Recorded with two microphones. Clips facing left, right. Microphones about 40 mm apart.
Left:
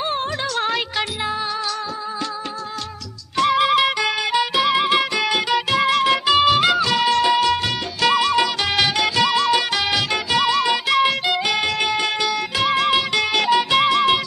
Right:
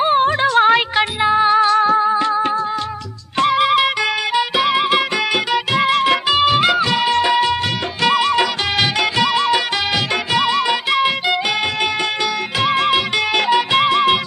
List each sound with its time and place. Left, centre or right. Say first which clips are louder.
0.0 s music: right 9 dB; right
3.3 s music: right 2 dB; right
8.0 s music: right 2 dB; right
12.6 s music: right 2 dB; right